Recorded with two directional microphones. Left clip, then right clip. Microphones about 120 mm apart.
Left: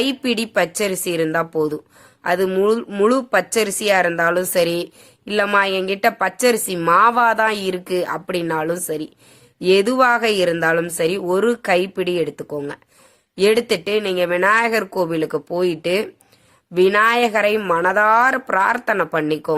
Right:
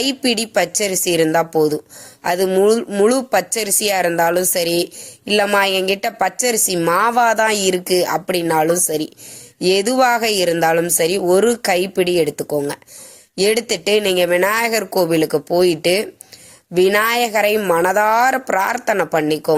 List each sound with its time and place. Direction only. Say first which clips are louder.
0.0 s speech: right 2 dB; 20° right (ahead or behind)